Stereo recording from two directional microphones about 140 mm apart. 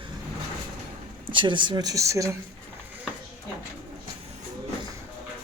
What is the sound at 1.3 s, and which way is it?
Speech, 35° right (ahead or behind).